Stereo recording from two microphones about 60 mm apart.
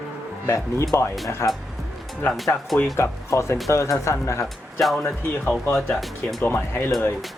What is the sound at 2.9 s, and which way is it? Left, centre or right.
Speech, left.